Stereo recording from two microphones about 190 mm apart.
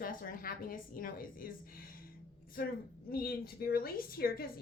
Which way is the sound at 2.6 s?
55° left (ahead or behind).